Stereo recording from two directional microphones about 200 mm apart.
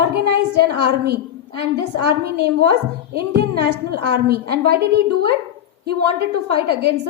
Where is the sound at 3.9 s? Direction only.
50° right (ahead or behind).